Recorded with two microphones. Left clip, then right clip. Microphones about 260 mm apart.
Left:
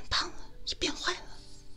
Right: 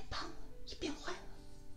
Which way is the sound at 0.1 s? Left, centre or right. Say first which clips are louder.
Left 14 dB; left.